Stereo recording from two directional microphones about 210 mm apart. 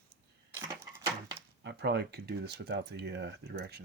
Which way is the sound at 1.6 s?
55° right (ahead or behind).